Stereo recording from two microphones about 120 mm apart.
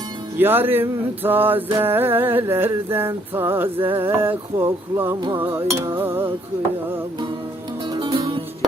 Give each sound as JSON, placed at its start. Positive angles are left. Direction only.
{"t": 0.3, "sound": "music", "side_deg": -15}
{"t": 7.9, "sound": "music", "side_deg": -40}